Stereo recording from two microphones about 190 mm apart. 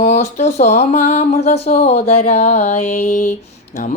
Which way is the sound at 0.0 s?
35° left (ahead or behind).